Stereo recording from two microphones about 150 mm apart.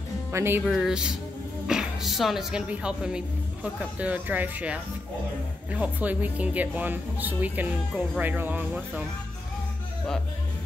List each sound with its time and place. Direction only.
0.3 s a woman's voice: 15° right (ahead or behind)
0.7 s a woman's voice: centre (ahead or behind)